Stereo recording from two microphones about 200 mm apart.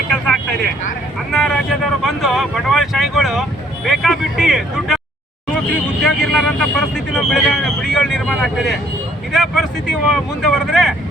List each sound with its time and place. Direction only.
1.3 s speech: centre (ahead or behind)
6.0 s speech: centre (ahead or behind)